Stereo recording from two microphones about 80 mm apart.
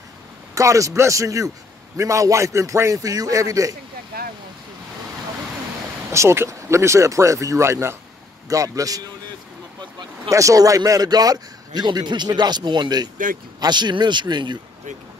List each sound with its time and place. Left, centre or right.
0.6 s a man's voice: right
6.1 s speech: right
8.5 s a man's voice: right
10.3 s a man's voice: right